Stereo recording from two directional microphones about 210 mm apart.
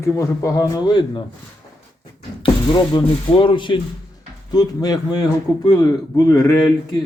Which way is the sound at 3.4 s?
25° left (ahead or behind).